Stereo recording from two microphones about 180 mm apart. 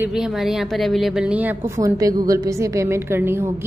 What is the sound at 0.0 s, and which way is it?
A woman's voice, 5° right (ahead or behind).